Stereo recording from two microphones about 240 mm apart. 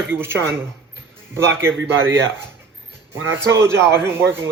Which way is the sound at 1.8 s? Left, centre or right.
Right.